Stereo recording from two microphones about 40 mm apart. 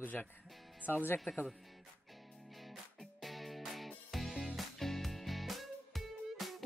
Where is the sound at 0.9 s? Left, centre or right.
Left.